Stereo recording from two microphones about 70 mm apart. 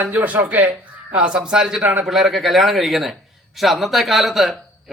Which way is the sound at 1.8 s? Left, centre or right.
Right.